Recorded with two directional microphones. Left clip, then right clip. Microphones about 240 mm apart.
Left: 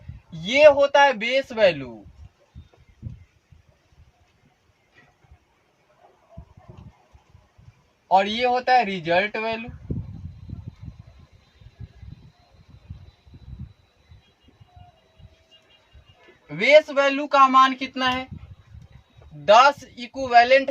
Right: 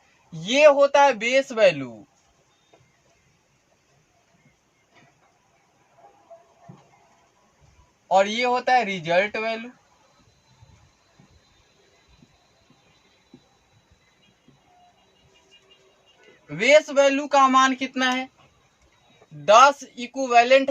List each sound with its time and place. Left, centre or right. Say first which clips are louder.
0.4 s speech: left 1 dB; centre
8.0 s speech: even; centre
16.5 s speech: left 1 dB; centre
19.5 s speech: even; centre